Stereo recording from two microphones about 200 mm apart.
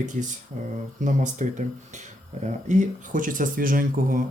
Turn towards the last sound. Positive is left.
turn(degrees=-45)  # may be behind; listen again after turning